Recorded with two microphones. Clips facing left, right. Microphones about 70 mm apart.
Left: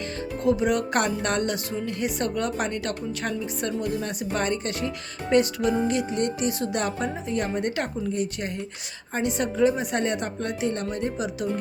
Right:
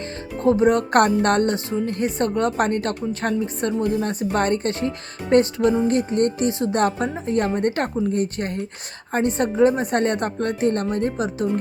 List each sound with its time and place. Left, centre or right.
0.4 s a woman's voice: right
1.5 s a woman's voice: right
4.3 s a woman's voice: right
6.5 s speech: right
6.7 s a woman's voice: right